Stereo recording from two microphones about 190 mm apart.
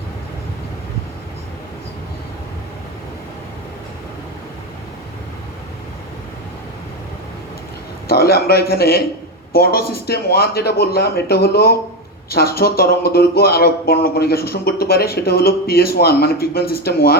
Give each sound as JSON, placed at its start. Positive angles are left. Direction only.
{"t": 8.0, "sound": "speech", "side_deg": 55}